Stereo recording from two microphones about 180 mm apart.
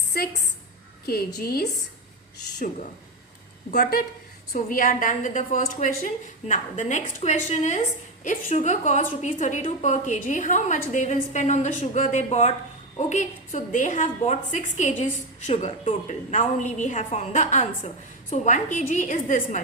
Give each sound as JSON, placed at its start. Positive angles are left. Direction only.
{"t": 0.1, "sound": "a woman's voice", "side_deg": 55}
{"t": 3.8, "sound": "a woman's voice", "side_deg": 55}